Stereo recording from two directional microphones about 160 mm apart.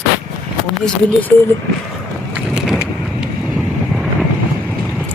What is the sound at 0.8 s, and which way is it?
Speech, 10° left (ahead or behind).